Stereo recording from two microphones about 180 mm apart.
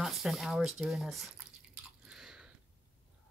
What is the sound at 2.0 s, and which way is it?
Chewing, 5° right (ahead or behind).